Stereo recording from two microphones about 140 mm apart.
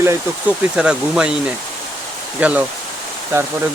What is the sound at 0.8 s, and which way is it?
Speech, 5° right (ahead or behind).